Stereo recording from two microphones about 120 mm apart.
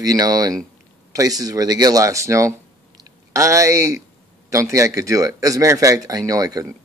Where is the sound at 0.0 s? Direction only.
30° right (ahead or behind).